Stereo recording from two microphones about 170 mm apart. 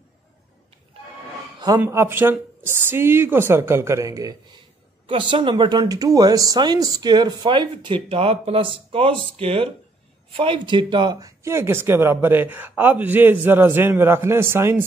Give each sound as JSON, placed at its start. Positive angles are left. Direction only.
{"t": 1.8, "sound": "speech", "side_deg": -15}